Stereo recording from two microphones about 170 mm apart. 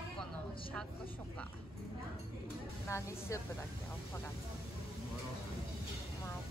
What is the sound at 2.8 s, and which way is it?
Speech, 15° left (ahead or behind).